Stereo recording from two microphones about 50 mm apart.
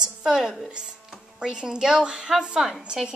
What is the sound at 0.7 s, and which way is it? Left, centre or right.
Music, centre.